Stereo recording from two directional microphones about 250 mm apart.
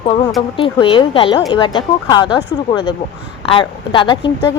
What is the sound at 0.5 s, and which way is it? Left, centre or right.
Speech, centre.